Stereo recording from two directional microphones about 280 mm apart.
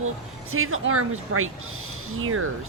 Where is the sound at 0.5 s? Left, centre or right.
Right.